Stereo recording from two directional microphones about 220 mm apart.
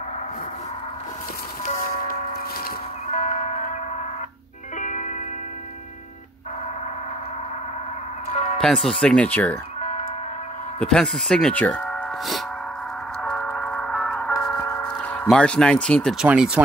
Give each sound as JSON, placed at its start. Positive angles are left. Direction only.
{"t": 1.8, "sound": "music", "side_deg": 40}
{"t": 4.7, "sound": "music", "side_deg": 35}
{"t": 8.3, "sound": "music", "side_deg": 30}
{"t": 8.5, "sound": "speech", "side_deg": 0}
{"t": 10.8, "sound": "speech", "side_deg": 5}
{"t": 13.2, "sound": "music", "side_deg": 5}
{"t": 14.4, "sound": "speech", "side_deg": 5}